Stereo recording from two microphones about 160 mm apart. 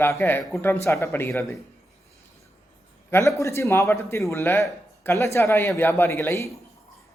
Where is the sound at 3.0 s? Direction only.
15° left (ahead or behind).